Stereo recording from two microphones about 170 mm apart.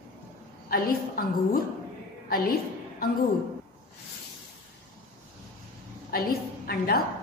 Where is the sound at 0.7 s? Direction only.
60° left (ahead or behind).